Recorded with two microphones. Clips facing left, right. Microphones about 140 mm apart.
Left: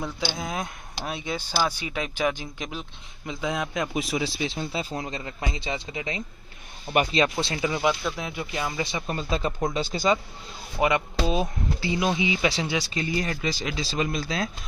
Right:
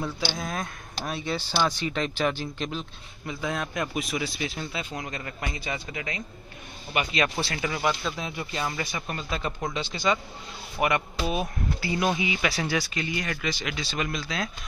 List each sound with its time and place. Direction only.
0.0 s speech: 15° left (ahead or behind)
3.9 s a man's voice: 30° left (ahead or behind)
6.9 s speech: 45° left (ahead or behind)
7.2 s a man's voice: 25° left (ahead or behind)
8.8 s a man's voice: 25° left (ahead or behind)
9.8 s speech: 45° left (ahead or behind)
10.8 s a man's voice: 20° left (ahead or behind)
12.9 s speech: 35° left (ahead or behind)